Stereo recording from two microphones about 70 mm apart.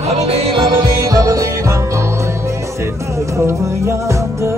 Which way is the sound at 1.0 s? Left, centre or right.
Right.